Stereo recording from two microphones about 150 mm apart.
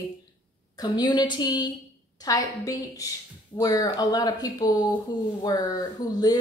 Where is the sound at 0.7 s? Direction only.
25° left (ahead or behind).